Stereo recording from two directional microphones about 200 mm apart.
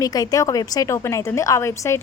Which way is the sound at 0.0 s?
20° left (ahead or behind).